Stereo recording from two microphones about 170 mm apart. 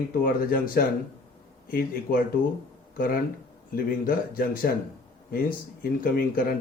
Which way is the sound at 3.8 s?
60° left (ahead or behind).